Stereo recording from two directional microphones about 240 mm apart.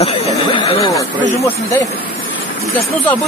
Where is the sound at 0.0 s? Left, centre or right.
Left.